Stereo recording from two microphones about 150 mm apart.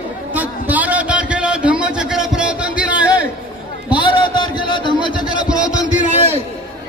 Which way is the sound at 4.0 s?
30° left (ahead or behind).